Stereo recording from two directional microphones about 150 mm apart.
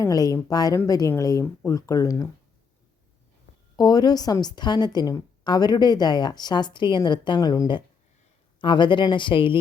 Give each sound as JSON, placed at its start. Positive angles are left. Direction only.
{"t": 0.0, "sound": "a woman's voice", "side_deg": 25}
{"t": 3.8, "sound": "a woman's voice", "side_deg": 25}